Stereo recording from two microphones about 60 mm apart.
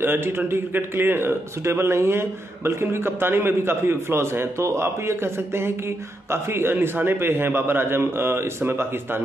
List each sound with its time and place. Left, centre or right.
0.0 s a man's voice: right